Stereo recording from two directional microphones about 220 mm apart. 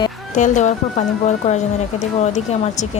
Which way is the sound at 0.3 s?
35° left (ahead or behind).